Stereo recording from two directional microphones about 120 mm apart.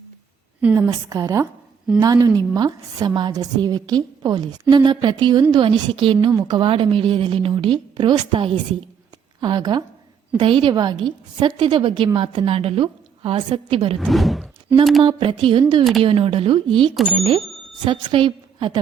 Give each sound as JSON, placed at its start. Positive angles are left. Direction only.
{"t": 0.7, "sound": "a woman's voice", "side_deg": -25}
{"t": 14.0, "sound": "speech", "side_deg": 0}
{"t": 15.0, "sound": "a woman's voice", "side_deg": -45}
{"t": 15.8, "sound": "speech", "side_deg": 0}
{"t": 16.0, "sound": "a woman's voice", "side_deg": -50}